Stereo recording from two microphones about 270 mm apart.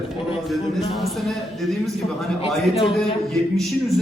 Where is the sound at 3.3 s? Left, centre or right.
Centre.